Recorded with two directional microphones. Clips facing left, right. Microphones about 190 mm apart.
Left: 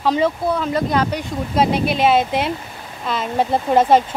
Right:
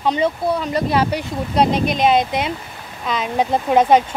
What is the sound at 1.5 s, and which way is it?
Speech, 5° left (ahead or behind).